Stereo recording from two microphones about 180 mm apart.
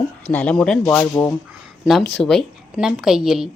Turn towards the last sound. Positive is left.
turn(degrees=0)  # may be behind; listen again after turning